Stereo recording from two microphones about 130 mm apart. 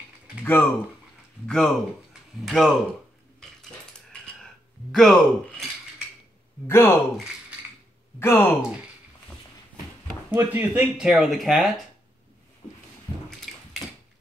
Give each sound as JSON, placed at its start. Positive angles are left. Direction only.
{"t": 0.4, "sound": "speech", "side_deg": 15}
{"t": 1.5, "sound": "speech", "side_deg": 5}
{"t": 4.9, "sound": "speech", "side_deg": 5}
{"t": 6.7, "sound": "speech", "side_deg": 20}
{"t": 8.2, "sound": "speech", "side_deg": 15}
{"t": 10.3, "sound": "speech", "side_deg": -15}
{"t": 13.1, "sound": "a sound", "side_deg": 30}
{"t": 13.5, "sound": "mechanisms", "side_deg": 0}